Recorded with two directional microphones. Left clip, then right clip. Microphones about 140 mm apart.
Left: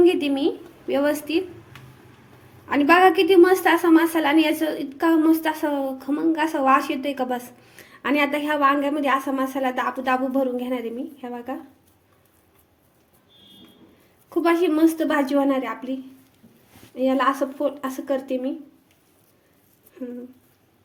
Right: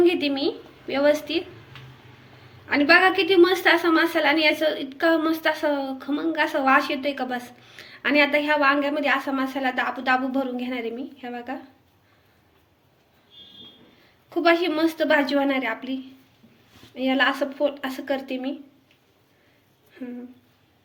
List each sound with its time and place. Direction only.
0.0 s a sound: centre (ahead or behind)
0.9 s a woman's voice: 70° left (ahead or behind)
1.1 s a woman's voice: centre (ahead or behind)
2.6 s a woman's voice: 75° left (ahead or behind)
14.4 s a woman's voice: 60° left (ahead or behind)